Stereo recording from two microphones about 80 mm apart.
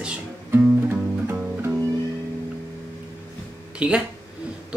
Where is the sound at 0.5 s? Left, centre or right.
Right.